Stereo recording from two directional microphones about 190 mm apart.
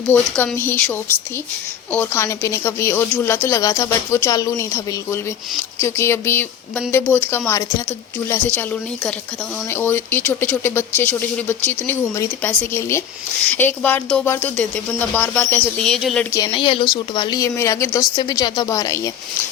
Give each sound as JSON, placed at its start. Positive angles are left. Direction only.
{"t": 0.1, "sound": "a woman's voice", "side_deg": 10}
{"t": 16.5, "sound": "a woman's voice", "side_deg": 30}